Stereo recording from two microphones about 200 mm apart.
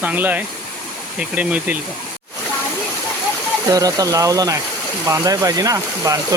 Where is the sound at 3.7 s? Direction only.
15° right (ahead or behind).